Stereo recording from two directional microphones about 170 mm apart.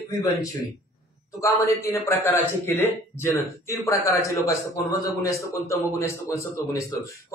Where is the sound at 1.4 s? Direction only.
20° left (ahead or behind).